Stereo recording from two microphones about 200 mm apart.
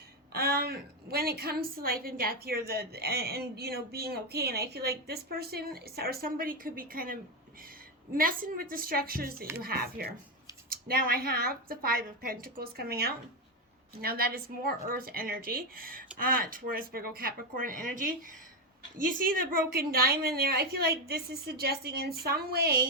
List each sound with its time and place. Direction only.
0.3 s a woman's voice: 50° right (ahead or behind)